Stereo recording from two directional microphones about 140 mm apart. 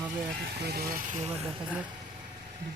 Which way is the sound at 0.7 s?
90° right.